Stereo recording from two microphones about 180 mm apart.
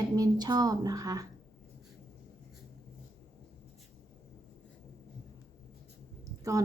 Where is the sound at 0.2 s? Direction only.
20° right (ahead or behind).